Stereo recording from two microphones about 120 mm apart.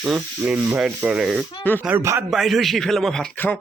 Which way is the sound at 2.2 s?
Centre (ahead or behind).